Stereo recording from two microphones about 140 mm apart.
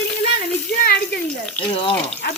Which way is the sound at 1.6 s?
40° left (ahead or behind).